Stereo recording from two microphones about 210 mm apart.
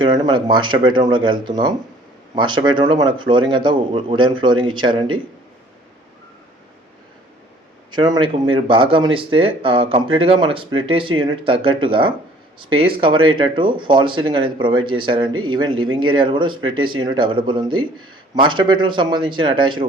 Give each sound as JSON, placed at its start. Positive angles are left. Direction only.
{"t": 0.0, "sound": "speech", "side_deg": -20}
{"t": 7.9, "sound": "speech", "side_deg": -20}